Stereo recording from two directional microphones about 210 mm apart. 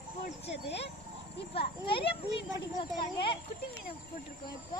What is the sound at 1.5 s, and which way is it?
Children playing, 25° left (ahead or behind).